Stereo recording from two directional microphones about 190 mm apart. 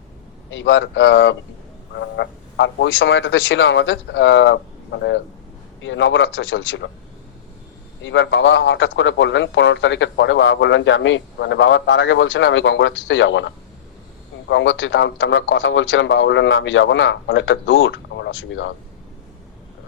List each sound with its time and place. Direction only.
0.5 s a man's voice: 75° left (ahead or behind)
8.0 s a man's voice: 80° left